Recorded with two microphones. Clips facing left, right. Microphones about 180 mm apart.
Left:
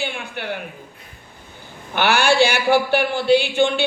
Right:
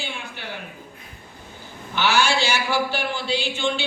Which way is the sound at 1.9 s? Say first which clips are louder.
Left 5 dB; 60° left (ahead or behind).